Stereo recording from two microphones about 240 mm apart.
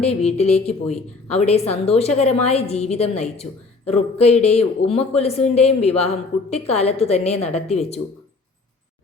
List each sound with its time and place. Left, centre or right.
0.0 s speech: left